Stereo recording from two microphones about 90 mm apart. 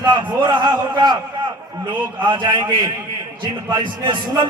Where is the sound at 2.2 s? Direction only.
55° right (ahead or behind).